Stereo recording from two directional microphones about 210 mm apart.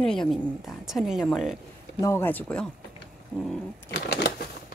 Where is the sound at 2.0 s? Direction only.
10° left (ahead or behind).